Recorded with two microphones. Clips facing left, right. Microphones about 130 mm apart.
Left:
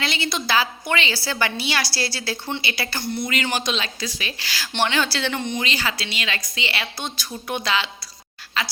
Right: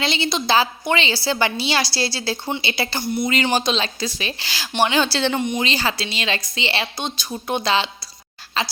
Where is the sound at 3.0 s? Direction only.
10° right (ahead or behind).